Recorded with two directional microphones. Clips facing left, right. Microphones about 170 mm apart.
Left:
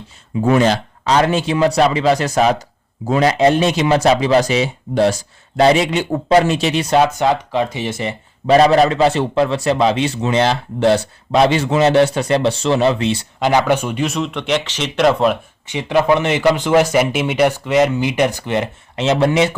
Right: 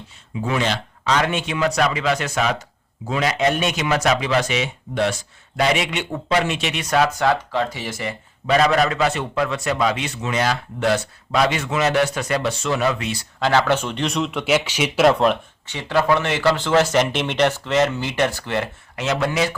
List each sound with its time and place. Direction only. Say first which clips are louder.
0.4 s speech: left 9 dB; 45° left (ahead or behind); by 13.2 s 30° left (ahead or behind)
13.4 s speech: left 3 dB; 15° left (ahead or behind)
15.6 s speech: left 5 dB; 15° left (ahead or behind)